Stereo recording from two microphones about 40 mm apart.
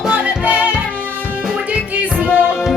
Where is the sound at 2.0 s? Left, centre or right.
Right.